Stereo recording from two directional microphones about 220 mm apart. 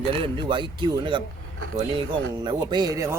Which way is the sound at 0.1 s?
25° right (ahead or behind).